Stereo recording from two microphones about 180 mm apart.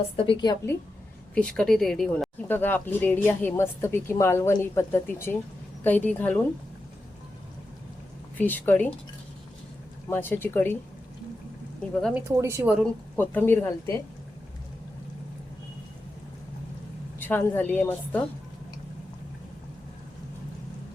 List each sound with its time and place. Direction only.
0.3 s a woman's voice: 25° left (ahead or behind)
1.4 s speech: 5° left (ahead or behind)
8.4 s speech: 10° left (ahead or behind)
10.1 s speech: 10° left (ahead or behind)
12.1 s a woman's voice: 15° right (ahead or behind)
12.8 s speech: 10° left (ahead or behind)
17.2 s speech: 10° left (ahead or behind)